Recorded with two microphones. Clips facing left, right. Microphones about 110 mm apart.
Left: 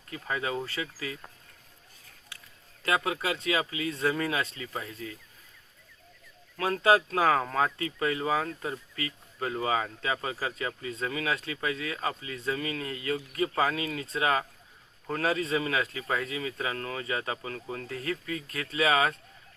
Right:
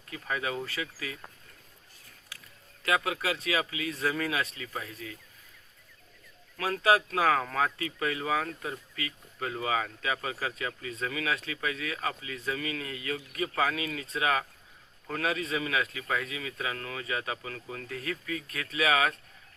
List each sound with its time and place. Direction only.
0.1 s speech: 20° left (ahead or behind)
2.8 s speech: 25° left (ahead or behind)
6.6 s speech: 25° left (ahead or behind)